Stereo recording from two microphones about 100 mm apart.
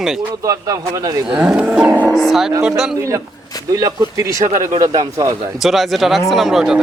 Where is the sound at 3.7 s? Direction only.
35° right (ahead or behind).